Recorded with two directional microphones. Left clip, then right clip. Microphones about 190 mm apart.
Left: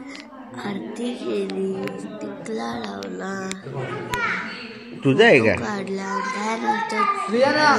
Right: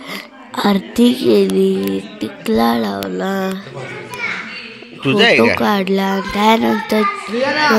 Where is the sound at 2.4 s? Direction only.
55° right (ahead or behind).